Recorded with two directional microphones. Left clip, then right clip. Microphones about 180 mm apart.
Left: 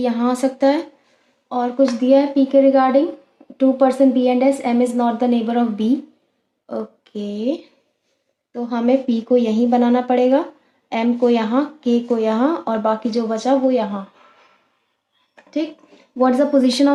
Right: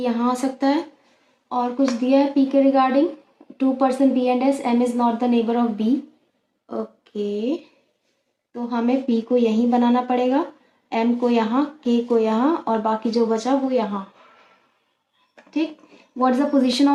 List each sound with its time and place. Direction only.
0.0 s a woman's voice: 40° left (ahead or behind)
16.2 s speech: 35° left (ahead or behind)